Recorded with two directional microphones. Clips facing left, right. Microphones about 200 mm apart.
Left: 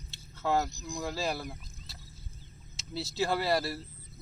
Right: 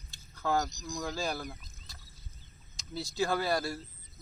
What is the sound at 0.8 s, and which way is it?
Speech, 30° left (ahead or behind).